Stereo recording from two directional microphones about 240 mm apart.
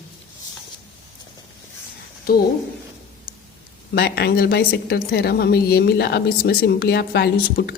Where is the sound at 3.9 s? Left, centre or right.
Left.